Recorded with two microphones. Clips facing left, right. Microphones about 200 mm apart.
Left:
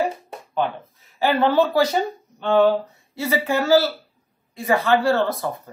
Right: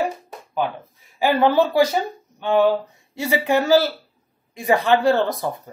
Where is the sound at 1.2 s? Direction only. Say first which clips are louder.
Right 1 dB; 15° right (ahead or behind).